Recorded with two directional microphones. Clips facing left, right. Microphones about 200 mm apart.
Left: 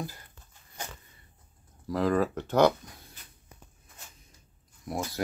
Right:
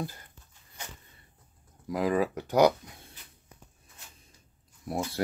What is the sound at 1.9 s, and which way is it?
Speech, 10° right (ahead or behind).